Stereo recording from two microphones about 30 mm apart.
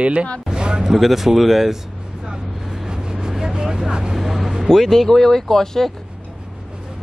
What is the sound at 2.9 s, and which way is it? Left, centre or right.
Vehicle, right.